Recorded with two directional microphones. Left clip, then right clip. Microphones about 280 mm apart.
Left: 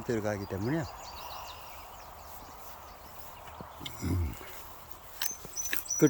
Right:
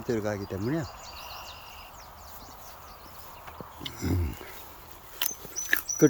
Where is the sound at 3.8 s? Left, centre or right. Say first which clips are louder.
Right 5 dB; centre.